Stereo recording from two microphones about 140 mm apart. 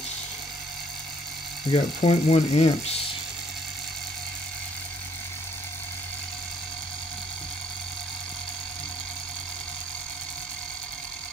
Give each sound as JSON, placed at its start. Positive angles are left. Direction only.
{"t": 1.7, "sound": "ratchet", "side_deg": 50}